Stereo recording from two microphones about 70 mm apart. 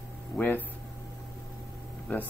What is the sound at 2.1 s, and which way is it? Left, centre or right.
Speech, left.